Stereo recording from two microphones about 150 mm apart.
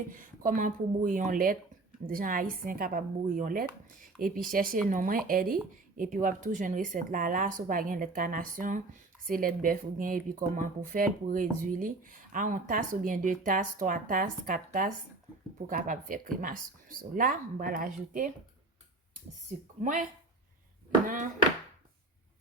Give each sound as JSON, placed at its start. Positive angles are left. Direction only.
{"t": 0.1, "sound": "speech", "side_deg": -65}
{"t": 19.8, "sound": "speech", "side_deg": -60}